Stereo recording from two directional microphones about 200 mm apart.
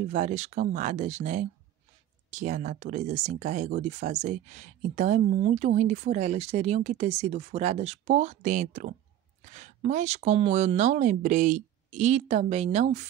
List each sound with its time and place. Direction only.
0.1 s speech: 35° right (ahead or behind)